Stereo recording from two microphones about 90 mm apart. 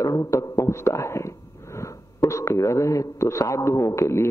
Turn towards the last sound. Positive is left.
turn(degrees=35)  # may be behind; listen again after turning